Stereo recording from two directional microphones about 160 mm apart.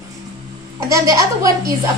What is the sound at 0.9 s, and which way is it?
Speech, 20° right (ahead or behind).